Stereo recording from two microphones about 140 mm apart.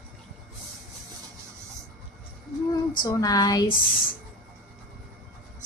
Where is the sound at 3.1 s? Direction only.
25° left (ahead or behind).